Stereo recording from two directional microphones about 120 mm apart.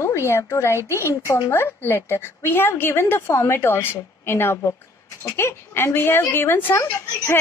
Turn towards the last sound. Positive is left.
turn(degrees=20)  # may be behind; listen again after turning